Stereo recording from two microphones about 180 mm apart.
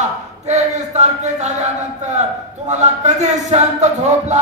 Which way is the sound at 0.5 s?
40° right (ahead or behind).